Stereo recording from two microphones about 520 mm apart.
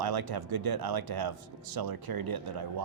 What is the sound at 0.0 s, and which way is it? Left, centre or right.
A man's voice, right.